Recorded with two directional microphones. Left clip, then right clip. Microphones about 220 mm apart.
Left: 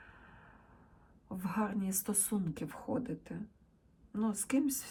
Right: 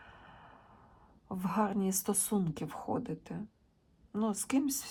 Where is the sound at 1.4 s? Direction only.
10° right (ahead or behind).